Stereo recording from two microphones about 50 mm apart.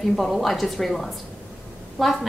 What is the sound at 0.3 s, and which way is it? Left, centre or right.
A woman's voice, centre.